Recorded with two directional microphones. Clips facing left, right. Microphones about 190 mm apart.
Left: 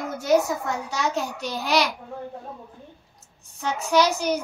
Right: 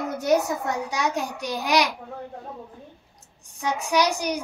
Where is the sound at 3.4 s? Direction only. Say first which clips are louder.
Right 1 dB; 15° right (ahead or behind).